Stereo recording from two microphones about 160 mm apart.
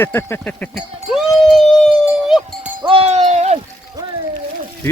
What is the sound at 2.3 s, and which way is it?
Speech, 5° right (ahead or behind).